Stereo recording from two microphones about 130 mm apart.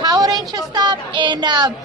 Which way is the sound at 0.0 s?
30° right (ahead or behind).